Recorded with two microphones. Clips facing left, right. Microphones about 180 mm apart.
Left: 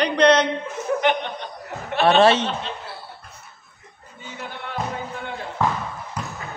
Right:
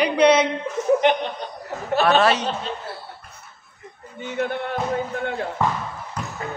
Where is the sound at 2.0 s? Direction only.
25° left (ahead or behind).